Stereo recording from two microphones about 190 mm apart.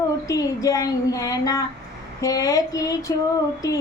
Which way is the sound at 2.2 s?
20° left (ahead or behind).